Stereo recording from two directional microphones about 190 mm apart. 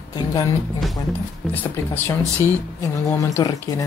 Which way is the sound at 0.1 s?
20° left (ahead or behind).